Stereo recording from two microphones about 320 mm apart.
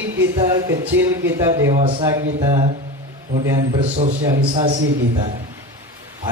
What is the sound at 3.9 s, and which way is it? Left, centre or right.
A man's voice, right.